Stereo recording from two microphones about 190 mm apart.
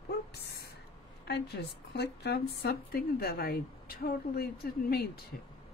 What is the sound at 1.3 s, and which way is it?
A woman's voice, 60° left (ahead or behind).